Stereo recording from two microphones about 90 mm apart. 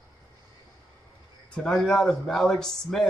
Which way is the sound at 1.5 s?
5° left (ahead or behind).